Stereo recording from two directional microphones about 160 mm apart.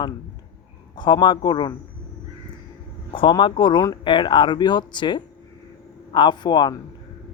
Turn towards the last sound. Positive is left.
turn(degrees=25)  # may be behind; listen again after turning